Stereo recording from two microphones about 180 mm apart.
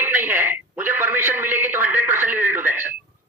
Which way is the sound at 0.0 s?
10° right (ahead or behind).